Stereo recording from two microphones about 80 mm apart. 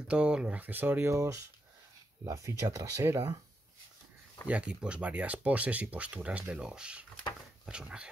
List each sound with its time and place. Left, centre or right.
0.1 s speech: centre
1.1 s speech: right
4.5 s speech: centre